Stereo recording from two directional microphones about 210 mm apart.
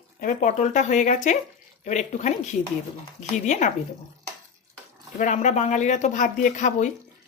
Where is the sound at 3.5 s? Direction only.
35° left (ahead or behind).